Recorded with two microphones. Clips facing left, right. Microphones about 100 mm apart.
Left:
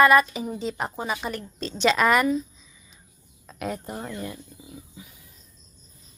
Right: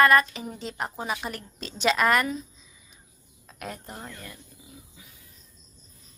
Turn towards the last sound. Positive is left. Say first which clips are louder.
# left 9 dB
turn(degrees=15)  # may be behind; listen again after turning